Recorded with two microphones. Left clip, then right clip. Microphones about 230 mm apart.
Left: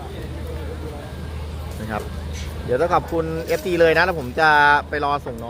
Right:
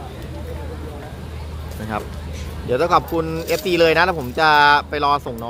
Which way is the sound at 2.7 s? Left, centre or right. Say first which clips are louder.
Right 2 dB; centre.